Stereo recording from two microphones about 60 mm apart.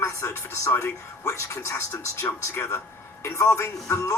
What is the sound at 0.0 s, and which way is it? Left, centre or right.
Speech, left.